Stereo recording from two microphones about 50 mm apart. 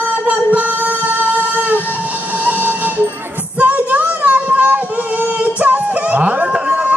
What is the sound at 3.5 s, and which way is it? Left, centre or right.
Child singing, right.